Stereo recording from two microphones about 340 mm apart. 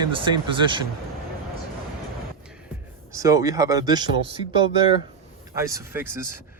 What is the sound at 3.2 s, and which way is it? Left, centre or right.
Speech, centre.